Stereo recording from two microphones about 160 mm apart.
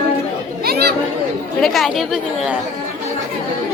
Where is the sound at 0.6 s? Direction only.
80° right.